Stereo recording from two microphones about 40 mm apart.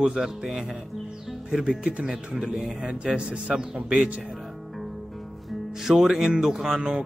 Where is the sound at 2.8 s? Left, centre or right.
Right.